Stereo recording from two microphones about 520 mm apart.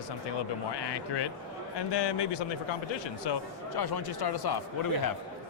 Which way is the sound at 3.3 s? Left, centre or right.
Left.